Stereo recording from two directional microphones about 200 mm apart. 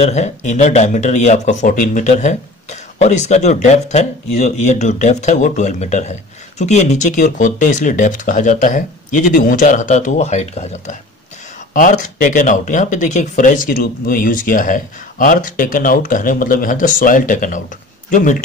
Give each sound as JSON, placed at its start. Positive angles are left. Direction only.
{"t": 0.0, "sound": "speech", "side_deg": 35}